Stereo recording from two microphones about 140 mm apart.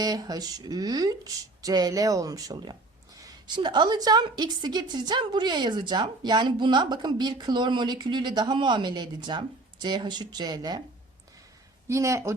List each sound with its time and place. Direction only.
0.0 s a woman's voice: 25° right (ahead or behind)
11.9 s speech: 20° right (ahead or behind)